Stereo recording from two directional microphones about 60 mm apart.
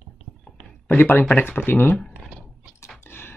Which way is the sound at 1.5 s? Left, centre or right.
Left.